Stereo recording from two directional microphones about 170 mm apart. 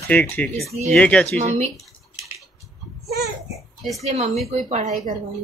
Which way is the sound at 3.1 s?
70° right (ahead or behind).